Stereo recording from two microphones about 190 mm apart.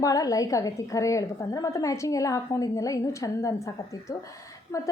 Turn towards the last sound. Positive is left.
turn(degrees=15)  # may be behind; listen again after turning